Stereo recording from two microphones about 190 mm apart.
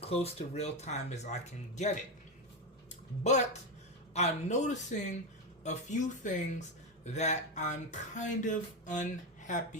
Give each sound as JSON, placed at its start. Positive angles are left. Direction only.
{"t": 0.0, "sound": "speech", "side_deg": 30}
{"t": 4.1, "sound": "speech", "side_deg": 35}